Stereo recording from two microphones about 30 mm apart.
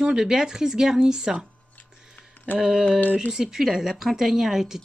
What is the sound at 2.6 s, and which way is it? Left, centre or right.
A woman's voice, centre.